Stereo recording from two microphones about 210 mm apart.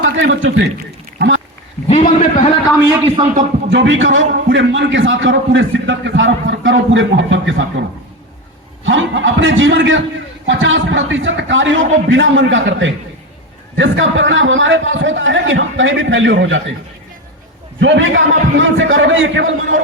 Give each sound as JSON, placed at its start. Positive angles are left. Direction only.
{"t": 0.0, "sound": "a man's voice", "side_deg": -60}
{"t": 1.9, "sound": "a man's voice", "side_deg": 35}
{"t": 3.7, "sound": "a man's voice", "side_deg": -60}
{"t": 17.7, "sound": "a man's voice", "side_deg": -60}